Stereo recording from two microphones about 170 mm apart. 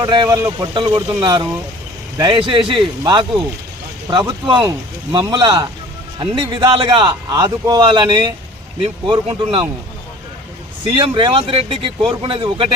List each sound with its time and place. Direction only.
0.0 s a man's voice: 25° right (ahead or behind)
10.9 s speech: 30° right (ahead or behind)